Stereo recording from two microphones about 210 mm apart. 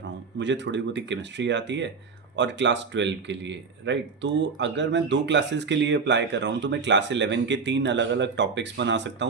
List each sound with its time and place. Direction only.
0.0 s speech: 60° right (ahead or behind)